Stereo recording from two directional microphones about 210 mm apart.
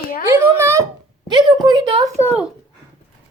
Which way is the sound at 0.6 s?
15° right (ahead or behind).